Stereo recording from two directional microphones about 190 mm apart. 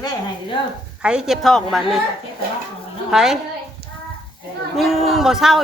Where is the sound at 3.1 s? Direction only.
Centre (ahead or behind).